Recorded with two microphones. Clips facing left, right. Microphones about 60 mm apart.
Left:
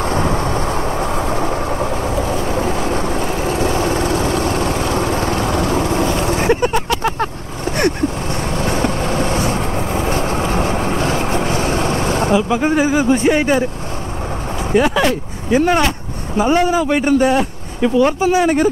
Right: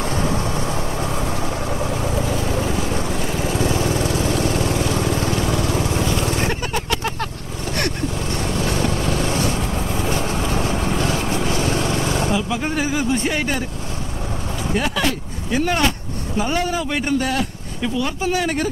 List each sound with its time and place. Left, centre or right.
0.0 s vehicle: left
6.4 s a sound: left
8.4 s vehicle: left
12.4 s speech: left
14.7 s speech: left